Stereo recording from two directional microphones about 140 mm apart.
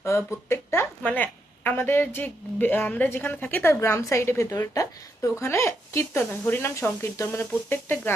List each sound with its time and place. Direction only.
0.0 s a woman's voice: 20° left (ahead or behind)